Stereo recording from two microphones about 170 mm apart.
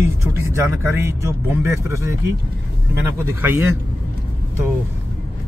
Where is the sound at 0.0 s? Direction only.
15° right (ahead or behind).